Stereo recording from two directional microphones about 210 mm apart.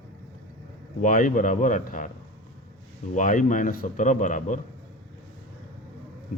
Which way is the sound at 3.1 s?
35° left (ahead or behind).